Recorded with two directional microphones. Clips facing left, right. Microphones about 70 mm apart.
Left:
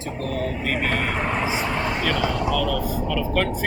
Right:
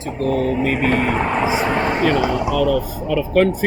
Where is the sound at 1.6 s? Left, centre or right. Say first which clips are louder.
Right 6 dB; right.